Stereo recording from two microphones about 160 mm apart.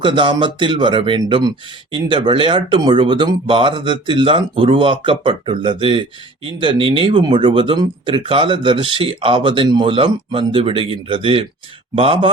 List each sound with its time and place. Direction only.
0.0 s speech: 30° right (ahead or behind)